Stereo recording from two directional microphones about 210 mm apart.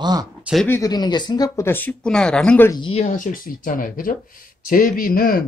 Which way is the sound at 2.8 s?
30° left (ahead or behind).